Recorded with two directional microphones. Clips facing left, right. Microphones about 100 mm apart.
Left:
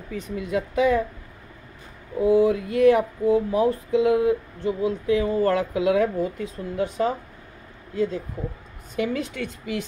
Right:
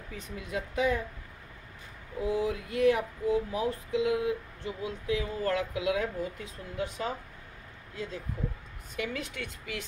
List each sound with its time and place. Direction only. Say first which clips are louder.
0.1 s speech: left 10 dB; 70° left (ahead or behind)
2.1 s speech: left 11 dB; 60° left (ahead or behind); by 9.8 s 30° left (ahead or behind)